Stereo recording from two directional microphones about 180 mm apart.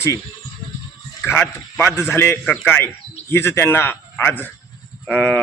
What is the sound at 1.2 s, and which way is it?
A man's voice, 10° left (ahead or behind).